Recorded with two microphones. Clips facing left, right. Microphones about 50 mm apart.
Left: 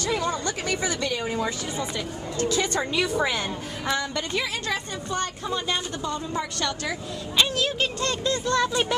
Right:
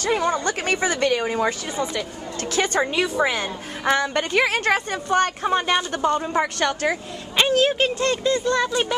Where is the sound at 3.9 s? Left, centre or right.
Right.